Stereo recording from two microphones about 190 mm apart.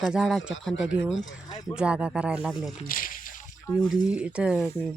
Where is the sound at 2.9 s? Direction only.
45° left (ahead or behind).